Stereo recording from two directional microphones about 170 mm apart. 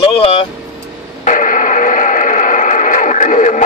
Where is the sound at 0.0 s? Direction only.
35° left (ahead or behind).